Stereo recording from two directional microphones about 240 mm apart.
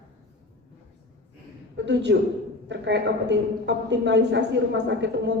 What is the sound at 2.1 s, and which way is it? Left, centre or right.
A woman's voice, right.